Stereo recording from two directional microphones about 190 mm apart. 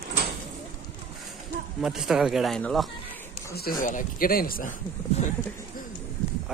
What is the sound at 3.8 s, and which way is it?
Speech, 45° left (ahead or behind).